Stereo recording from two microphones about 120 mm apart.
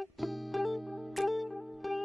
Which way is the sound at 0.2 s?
Centre (ahead or behind).